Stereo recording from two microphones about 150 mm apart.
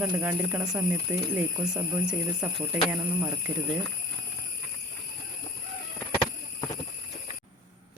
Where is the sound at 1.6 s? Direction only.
5° right (ahead or behind).